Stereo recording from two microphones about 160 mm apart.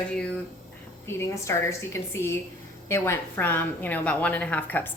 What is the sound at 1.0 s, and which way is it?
A woman's voice, 15° left (ahead or behind).